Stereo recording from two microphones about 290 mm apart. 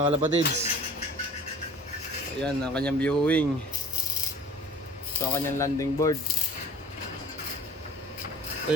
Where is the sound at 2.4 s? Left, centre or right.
Centre.